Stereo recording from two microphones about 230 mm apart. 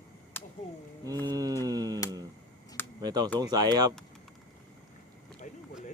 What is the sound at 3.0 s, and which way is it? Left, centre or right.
Speech, centre.